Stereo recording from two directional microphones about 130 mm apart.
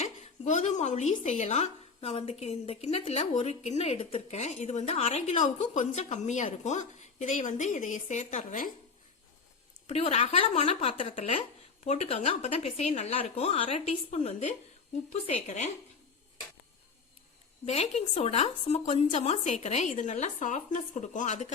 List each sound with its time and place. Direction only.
0.0 s a sound: 65° left (ahead or behind)
1.2 s a woman's voice: 60° left (ahead or behind); by 8.7 s 80° left
9.8 s a woman's voice: 55° left (ahead or behind)
15.1 s a woman's voice: 60° left (ahead or behind)
17.7 s a woman's voice: 55° left (ahead or behind)